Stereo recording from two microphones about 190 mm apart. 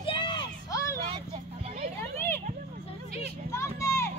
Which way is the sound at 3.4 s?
15° left (ahead or behind).